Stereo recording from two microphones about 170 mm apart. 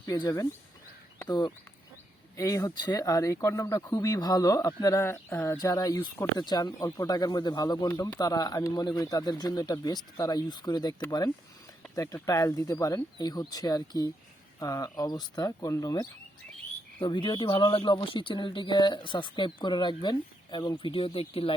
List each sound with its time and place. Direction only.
0.2 s speech: 20° left (ahead or behind)